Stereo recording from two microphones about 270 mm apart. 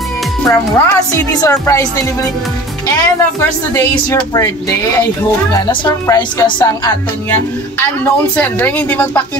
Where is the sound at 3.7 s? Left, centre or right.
Centre.